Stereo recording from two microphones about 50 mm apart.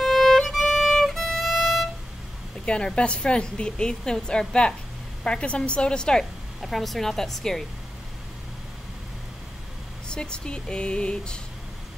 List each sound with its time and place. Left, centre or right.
0.0 s violin: centre
1.0 s music: centre
2.6 s a woman's voice: left
6.6 s a woman's voice: centre
10.0 s a woman's voice: centre